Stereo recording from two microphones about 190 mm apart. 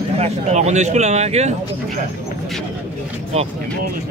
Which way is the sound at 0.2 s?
35° right (ahead or behind).